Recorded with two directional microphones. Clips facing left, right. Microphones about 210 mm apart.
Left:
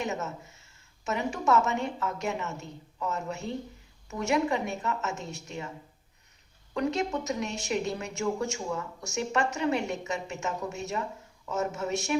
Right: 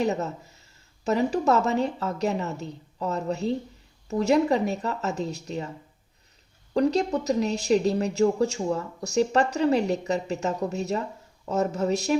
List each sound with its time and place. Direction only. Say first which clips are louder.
0.0 s a woman's voice: right 7 dB; 35° right (ahead or behind)
6.7 s a woman's voice: right 6 dB; 35° right (ahead or behind)